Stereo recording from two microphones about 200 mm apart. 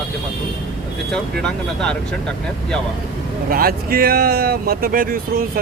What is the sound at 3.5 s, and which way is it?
Speech, 45° right (ahead or behind).